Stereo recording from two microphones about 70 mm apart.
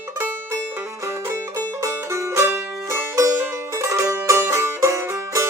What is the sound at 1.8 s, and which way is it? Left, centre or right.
Music, right.